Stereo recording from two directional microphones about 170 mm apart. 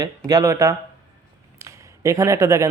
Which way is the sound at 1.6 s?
20° right (ahead or behind).